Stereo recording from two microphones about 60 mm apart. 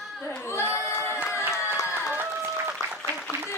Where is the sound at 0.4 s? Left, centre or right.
Left.